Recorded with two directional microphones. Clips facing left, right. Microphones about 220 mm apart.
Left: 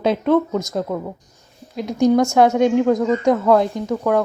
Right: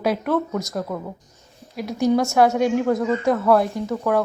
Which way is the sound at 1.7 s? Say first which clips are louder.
Left 4 dB; 15° left (ahead or behind).